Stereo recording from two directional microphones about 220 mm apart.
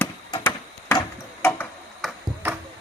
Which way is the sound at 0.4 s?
10° left (ahead or behind).